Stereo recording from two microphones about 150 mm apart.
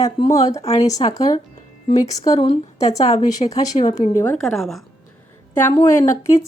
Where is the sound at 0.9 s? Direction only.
25° left (ahead or behind).